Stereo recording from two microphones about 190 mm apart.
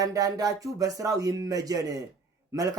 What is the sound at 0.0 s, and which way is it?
Speech, 20° right (ahead or behind).